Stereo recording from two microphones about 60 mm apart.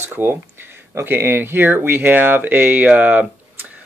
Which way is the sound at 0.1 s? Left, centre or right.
Right.